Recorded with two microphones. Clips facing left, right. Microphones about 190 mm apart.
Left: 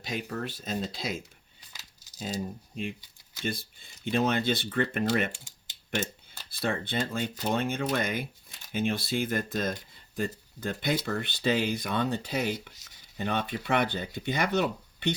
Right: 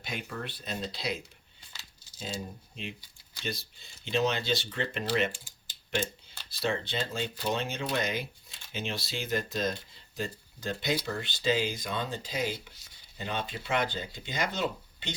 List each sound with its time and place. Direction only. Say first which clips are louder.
0.0 s speech: left 4 dB; 40° left (ahead or behind); by 15.1 s 60° left (ahead or behind)